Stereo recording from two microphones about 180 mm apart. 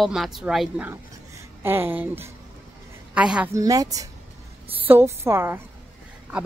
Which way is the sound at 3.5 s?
20° right (ahead or behind).